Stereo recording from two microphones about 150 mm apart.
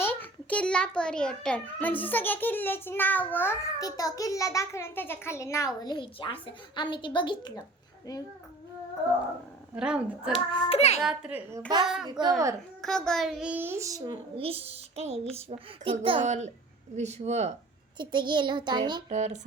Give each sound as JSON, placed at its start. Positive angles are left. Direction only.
{"t": 0.0, "sound": "a child's voice", "side_deg": 15}
{"t": 3.8, "sound": "a child's voice", "side_deg": 25}
{"t": 9.7, "sound": "a child's voice", "side_deg": -5}
{"t": 10.3, "sound": "hands", "side_deg": 35}
{"t": 11.0, "sound": "a child's voice", "side_deg": -5}
{"t": 14.3, "sound": "a child's voice", "side_deg": -40}
{"t": 16.2, "sound": "speech", "side_deg": -50}
{"t": 17.9, "sound": "a child's voice", "side_deg": -30}
{"t": 19.0, "sound": "speech", "side_deg": -50}